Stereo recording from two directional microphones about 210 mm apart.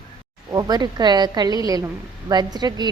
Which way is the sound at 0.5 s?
20° right (ahead or behind).